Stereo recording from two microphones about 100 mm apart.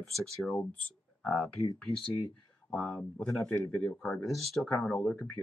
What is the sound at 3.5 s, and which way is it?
Speech, 25° left (ahead or behind).